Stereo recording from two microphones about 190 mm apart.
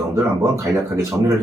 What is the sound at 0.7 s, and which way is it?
Speech, 15° right (ahead or behind).